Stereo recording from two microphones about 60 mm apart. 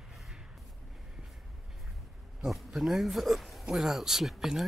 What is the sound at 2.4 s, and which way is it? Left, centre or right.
Speech, centre.